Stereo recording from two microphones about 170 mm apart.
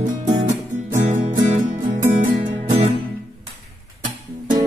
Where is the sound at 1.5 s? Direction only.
50° right (ahead or behind).